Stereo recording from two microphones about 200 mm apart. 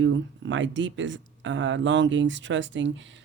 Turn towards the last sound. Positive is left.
turn(degrees=-65)  # may be behind; listen again after turning